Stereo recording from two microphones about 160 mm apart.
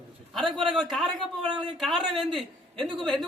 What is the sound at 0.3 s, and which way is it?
A man's voice, centre (ahead or behind).